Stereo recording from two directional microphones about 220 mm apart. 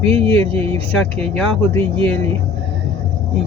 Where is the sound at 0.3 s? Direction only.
25° right (ahead or behind).